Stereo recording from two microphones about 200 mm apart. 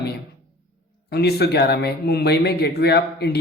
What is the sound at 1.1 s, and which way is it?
Speech, 55° left (ahead or behind).